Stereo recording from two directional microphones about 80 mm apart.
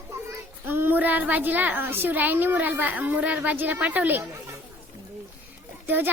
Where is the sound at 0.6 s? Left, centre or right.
Right.